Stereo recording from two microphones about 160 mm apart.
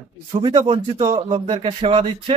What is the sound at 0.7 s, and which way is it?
Speech, 40° right (ahead or behind).